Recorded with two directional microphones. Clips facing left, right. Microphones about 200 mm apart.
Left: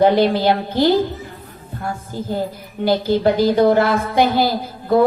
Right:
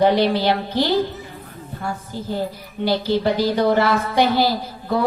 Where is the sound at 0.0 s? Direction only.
50° left (ahead or behind).